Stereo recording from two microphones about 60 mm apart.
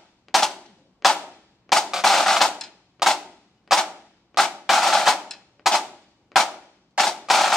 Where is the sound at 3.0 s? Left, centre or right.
Centre.